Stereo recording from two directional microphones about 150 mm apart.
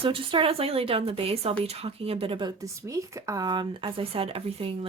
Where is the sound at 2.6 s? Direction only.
20° right (ahead or behind); by 4.9 s 40° right (ahead or behind).